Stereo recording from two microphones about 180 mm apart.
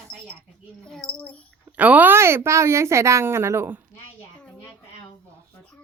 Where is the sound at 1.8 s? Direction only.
10° right (ahead or behind).